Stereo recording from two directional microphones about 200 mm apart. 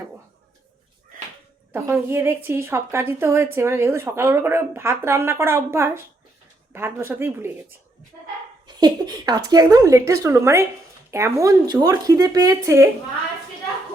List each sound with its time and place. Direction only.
1.7 s a woman's voice: 10° right (ahead or behind)
8.6 s a woman's voice: 20° right (ahead or behind)